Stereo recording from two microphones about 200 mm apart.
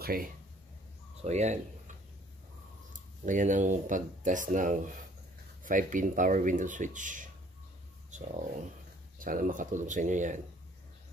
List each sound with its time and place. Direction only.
0.0 s speech: 45° right (ahead or behind)
1.2 s speech: 35° right (ahead or behind)
2.9 s speech: 40° right (ahead or behind)
8.1 s a sound: 35° right (ahead or behind)
9.2 s speech: 45° right (ahead or behind)